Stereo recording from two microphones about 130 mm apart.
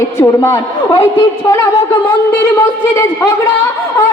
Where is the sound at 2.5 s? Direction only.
20° left (ahead or behind).